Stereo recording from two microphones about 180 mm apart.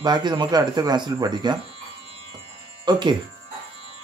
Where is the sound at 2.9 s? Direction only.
25° right (ahead or behind).